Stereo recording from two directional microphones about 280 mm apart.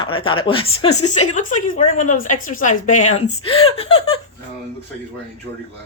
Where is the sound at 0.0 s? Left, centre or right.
Centre.